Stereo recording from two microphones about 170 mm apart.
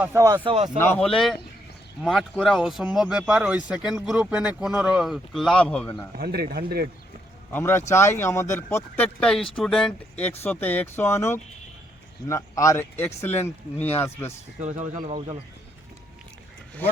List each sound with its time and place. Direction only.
0.0 s speech: 15° right (ahead or behind)
0.4 s speech: 35° right (ahead or behind)
0.9 s speech: 5° left (ahead or behind)
6.1 s speech: 70° right (ahead or behind)
7.5 s speech: 15° left (ahead or behind)
14.6 s speech: 45° right (ahead or behind)
14.9 s speech: 30° right (ahead or behind)